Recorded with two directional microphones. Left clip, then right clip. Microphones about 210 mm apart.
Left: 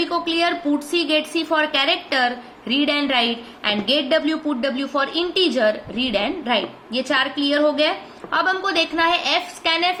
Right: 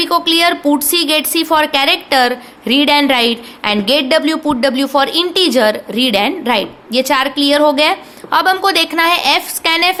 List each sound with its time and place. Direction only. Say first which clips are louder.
0.0 s a woman's voice: right 8 dB; 55° right (ahead or behind)